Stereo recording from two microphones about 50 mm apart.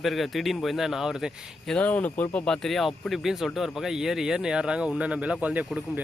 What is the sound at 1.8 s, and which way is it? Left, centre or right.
Speech, left.